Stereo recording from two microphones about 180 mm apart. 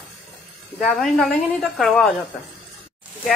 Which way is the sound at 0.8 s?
Centre (ahead or behind).